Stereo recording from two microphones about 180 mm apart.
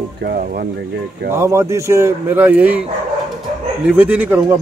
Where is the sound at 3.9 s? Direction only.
5° right (ahead or behind).